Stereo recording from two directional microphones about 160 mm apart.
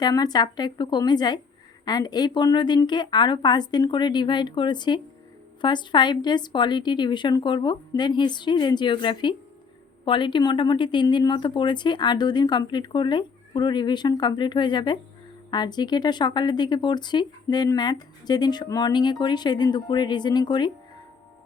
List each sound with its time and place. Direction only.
0.0 s speech: 25° left (ahead or behind)